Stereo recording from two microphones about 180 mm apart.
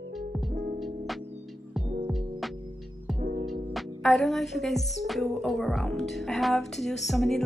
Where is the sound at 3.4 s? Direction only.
Centre (ahead or behind).